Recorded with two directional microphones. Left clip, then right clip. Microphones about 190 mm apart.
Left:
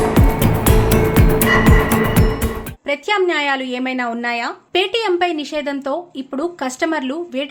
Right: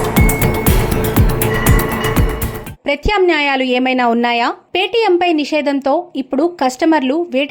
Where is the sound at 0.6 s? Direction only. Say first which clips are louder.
Left 1 dB; centre (ahead or behind).